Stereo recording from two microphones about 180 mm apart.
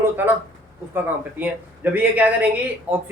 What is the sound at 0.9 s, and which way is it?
Speech, 10° right (ahead or behind).